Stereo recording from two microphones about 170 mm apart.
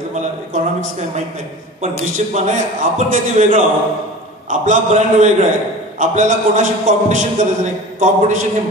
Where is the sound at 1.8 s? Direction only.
45° right (ahead or behind).